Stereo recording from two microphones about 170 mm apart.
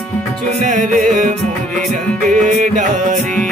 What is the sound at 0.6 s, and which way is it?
Music, 50° right (ahead or behind).